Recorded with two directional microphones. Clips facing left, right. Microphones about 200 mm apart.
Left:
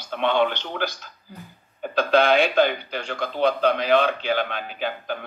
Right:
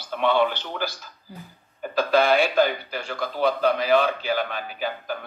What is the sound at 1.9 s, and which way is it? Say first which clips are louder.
A woman's voice: left 1 dB; 5° right (ahead or behind).